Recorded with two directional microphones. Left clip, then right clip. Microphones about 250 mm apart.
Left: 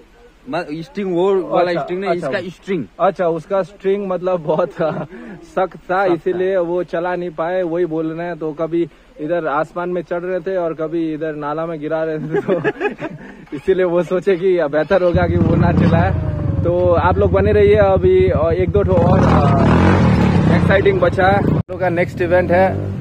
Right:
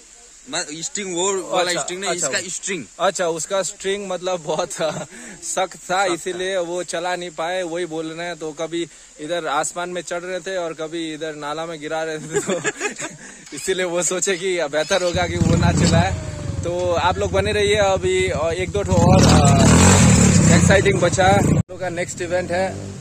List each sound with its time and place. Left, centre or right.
0.5 s speech: centre
3.0 s speech: right
12.6 s speech: centre
13.7 s speech: right
19.7 s vehicle: centre
20.6 s speech: centre